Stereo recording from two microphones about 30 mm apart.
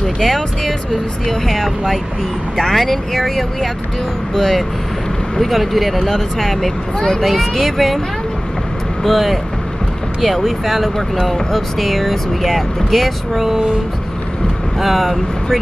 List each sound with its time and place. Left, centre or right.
0.0 s speech: centre
5.5 s speech: centre
6.0 s speech: centre
7.2 s speech: centre
9.0 s speech: centre
14.8 s speech: centre